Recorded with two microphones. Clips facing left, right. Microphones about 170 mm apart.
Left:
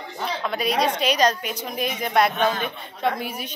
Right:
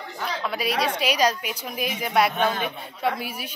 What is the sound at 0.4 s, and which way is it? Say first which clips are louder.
A woman's voice: left 3 dB; 5° right (ahead or behind).